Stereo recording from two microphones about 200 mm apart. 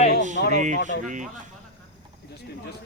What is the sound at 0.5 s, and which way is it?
Speech, 40° right (ahead or behind).